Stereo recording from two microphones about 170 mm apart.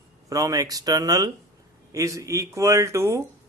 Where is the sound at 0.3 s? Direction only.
20° right (ahead or behind).